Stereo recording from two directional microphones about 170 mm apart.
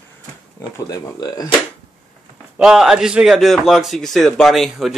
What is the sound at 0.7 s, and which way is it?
Speech, 20° left (ahead or behind).